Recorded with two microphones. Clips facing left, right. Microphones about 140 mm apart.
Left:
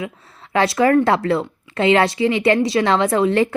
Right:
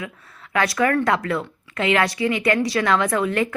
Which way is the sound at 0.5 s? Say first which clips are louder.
Left 5 dB; 25° left (ahead or behind).